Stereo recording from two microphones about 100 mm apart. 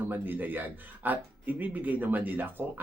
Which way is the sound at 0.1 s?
20° right (ahead or behind).